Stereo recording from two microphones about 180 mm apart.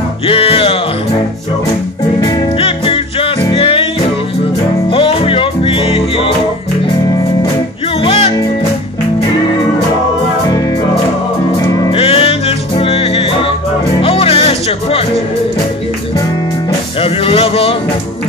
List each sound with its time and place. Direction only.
0.3 s music: 30° left (ahead or behind)
2.1 s music: 25° left (ahead or behind)
4.8 s music: 30° left (ahead or behind)
8.0 s music: 30° left (ahead or behind)
11.6 s music: 20° left (ahead or behind)
11.9 s music: 30° left (ahead or behind)
17.0 s music: 30° left (ahead or behind)